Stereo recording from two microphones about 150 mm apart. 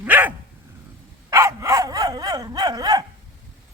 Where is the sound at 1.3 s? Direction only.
20° right (ahead or behind).